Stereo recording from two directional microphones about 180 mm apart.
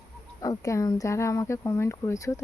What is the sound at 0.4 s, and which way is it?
Speech, 20° left (ahead or behind).